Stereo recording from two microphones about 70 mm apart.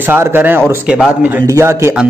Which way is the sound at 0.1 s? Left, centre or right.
Right.